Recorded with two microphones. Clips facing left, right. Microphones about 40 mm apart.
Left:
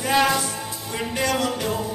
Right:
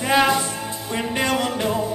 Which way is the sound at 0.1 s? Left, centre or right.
Centre.